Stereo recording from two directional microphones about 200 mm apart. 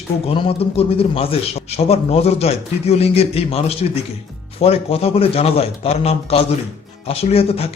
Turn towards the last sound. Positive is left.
turn(degrees=30)  # may be behind; listen again after turning